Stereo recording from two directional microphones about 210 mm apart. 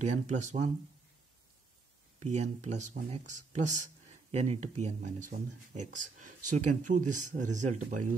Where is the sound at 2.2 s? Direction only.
35° right (ahead or behind).